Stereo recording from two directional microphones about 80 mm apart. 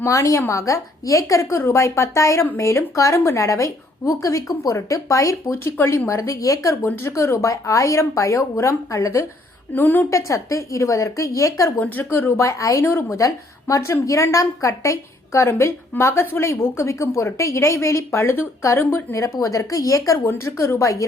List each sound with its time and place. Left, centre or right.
0.0 s a woman's voice: left
6.8 s a woman's voice: left
9.7 s a woman's voice: left
10.1 s a woman's voice: left
12.8 s a woman's voice: left
20.2 s a woman's voice: left